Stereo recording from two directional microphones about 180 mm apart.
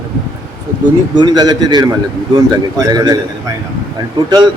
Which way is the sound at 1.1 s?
25° right (ahead or behind).